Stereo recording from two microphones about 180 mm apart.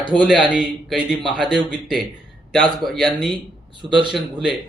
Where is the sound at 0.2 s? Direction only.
5° right (ahead or behind).